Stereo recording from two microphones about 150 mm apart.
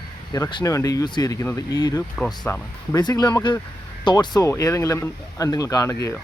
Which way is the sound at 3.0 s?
30° left (ahead or behind).